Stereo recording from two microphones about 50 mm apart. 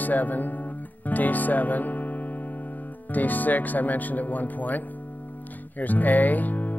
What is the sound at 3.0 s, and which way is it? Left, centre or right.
Speech, left.